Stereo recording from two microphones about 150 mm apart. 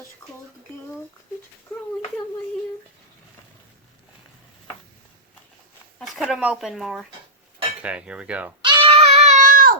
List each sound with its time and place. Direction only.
6.0 s speech: centre (ahead or behind)
7.8 s cutlery: 10° right (ahead or behind)
8.6 s a sound: 35° right (ahead or behind); by 9.7 s 65° right (ahead or behind)